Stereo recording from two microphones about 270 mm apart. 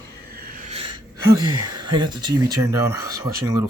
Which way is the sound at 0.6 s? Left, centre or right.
Right.